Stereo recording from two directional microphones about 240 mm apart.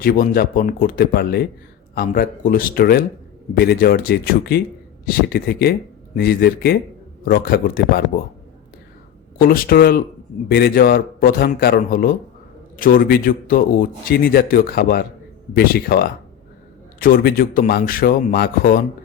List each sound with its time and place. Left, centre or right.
0.0 s speech: left
9.4 s speech: left